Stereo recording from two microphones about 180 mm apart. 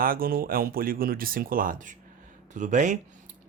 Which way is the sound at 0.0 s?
55° right (ahead or behind).